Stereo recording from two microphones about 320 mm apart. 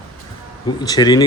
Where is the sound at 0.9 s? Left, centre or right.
Centre.